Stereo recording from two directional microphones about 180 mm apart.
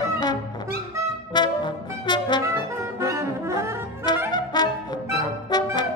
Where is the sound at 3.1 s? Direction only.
15° right (ahead or behind).